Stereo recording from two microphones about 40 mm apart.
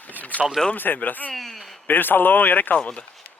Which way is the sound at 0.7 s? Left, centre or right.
Left.